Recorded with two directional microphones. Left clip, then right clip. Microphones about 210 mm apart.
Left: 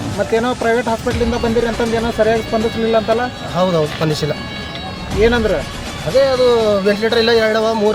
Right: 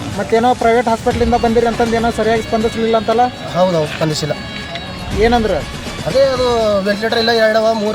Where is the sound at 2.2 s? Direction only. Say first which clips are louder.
Left 3 dB; 50° right (ahead or behind).